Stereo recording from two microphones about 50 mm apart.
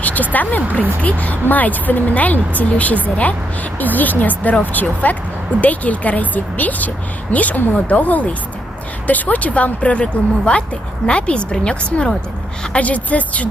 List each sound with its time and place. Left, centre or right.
0.0 s speech: left